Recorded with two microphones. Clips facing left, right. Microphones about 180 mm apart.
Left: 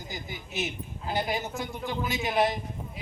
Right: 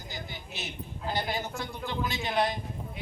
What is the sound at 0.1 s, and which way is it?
A man's voice, 15° left (ahead or behind).